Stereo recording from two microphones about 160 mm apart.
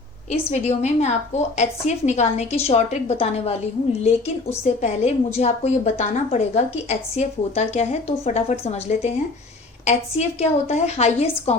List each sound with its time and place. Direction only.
0.3 s a woman's voice: 45° left (ahead or behind)
4.6 s a woman's voice: 45° left (ahead or behind)